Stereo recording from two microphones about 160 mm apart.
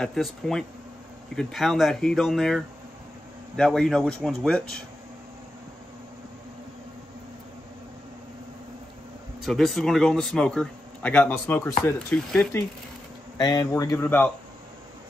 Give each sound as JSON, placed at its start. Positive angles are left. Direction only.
{"t": 0.0, "sound": "speech", "side_deg": 5}
{"t": 9.4, "sound": "speech", "side_deg": 0}
{"t": 12.1, "sound": "speech", "side_deg": 5}
{"t": 13.4, "sound": "speech", "side_deg": 25}
{"t": 14.0, "sound": "speech", "side_deg": 10}